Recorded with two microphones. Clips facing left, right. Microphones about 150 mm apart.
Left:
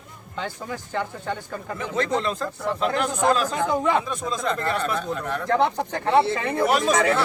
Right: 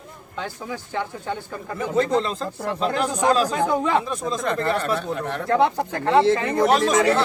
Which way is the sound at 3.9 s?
Centre (ahead or behind).